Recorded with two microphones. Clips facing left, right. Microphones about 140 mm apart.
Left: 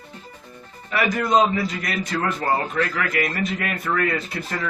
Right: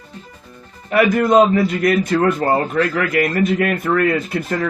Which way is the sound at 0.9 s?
50° right (ahead or behind).